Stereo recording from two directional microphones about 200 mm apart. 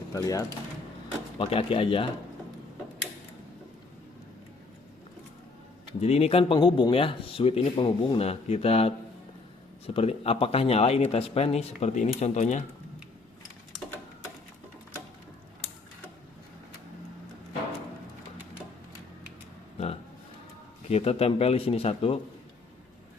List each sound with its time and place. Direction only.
0.1 s speech: 15° left (ahead or behind)
1.4 s speech: 25° left (ahead or behind)
6.0 s speech: 30° left (ahead or behind)
20.9 s speech: 30° left (ahead or behind)